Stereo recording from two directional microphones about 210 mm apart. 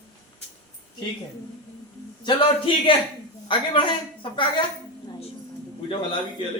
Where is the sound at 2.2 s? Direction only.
25° left (ahead or behind).